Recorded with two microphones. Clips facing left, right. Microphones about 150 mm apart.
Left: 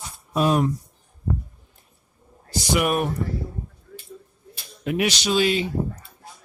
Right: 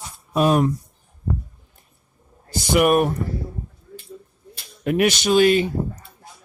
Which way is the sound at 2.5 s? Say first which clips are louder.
Right 5 dB; 50° right (ahead or behind).